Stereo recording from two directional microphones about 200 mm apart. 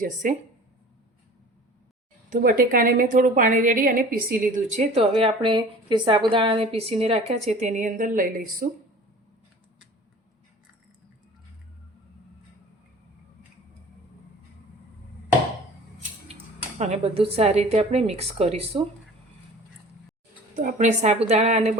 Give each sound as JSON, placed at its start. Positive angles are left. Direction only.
{"t": 0.0, "sound": "a woman's voice", "side_deg": -40}
{"t": 2.3, "sound": "a woman's voice", "side_deg": -45}
{"t": 16.7, "sound": "a woman's voice", "side_deg": -35}
{"t": 20.6, "sound": "a woman's voice", "side_deg": -35}